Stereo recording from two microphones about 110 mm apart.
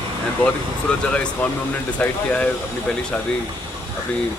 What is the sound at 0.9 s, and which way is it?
Speech, 10° left (ahead or behind).